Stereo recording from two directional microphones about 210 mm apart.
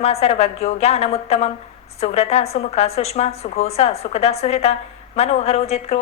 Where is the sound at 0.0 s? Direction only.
30° left (ahead or behind).